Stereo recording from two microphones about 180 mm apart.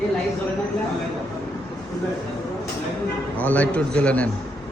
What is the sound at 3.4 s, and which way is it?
Speech, 10° left (ahead or behind).